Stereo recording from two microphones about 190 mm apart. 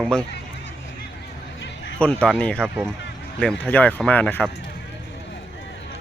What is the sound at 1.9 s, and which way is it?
Speech, 5° left (ahead or behind).